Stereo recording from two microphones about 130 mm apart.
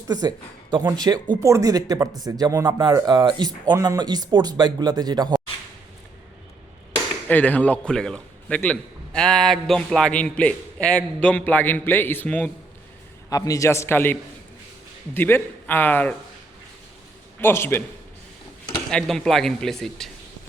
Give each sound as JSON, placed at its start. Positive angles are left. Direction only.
{"t": 0.1, "sound": "speech", "side_deg": -30}
{"t": 7.3, "sound": "a man's voice", "side_deg": 15}
{"t": 13.3, "sound": "a man's voice", "side_deg": 25}
{"t": 17.4, "sound": "a man's voice", "side_deg": 15}
{"t": 18.9, "sound": "speech", "side_deg": 5}